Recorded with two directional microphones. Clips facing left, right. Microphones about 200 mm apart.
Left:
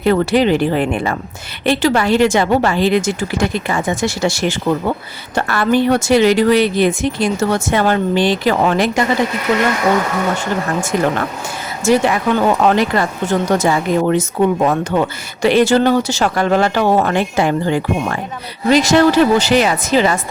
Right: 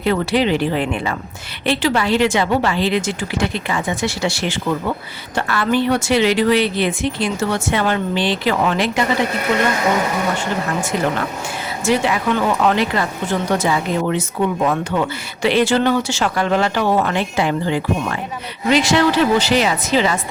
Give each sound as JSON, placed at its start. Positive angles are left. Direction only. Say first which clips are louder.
{"t": 0.0, "sound": "speech", "louder": "left 4 dB", "side_deg": 45}
{"t": 11.9, "sound": "speech", "louder": "left 4 dB", "side_deg": 40}